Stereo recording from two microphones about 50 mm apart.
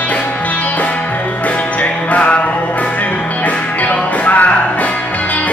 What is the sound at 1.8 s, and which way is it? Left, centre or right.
Music, left.